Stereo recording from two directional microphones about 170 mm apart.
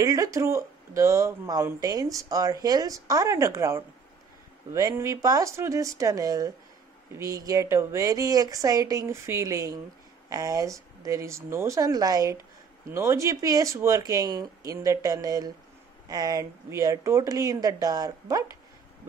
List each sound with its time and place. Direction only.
0.0 s speech: 20° right (ahead or behind)